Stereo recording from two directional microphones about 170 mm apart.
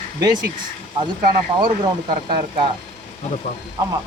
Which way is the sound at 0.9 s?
30° right (ahead or behind).